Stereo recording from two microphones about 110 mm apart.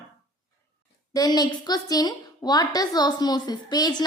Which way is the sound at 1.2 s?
35° left (ahead or behind).